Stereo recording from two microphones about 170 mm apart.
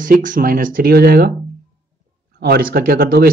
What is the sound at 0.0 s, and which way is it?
Speech, 50° right (ahead or behind).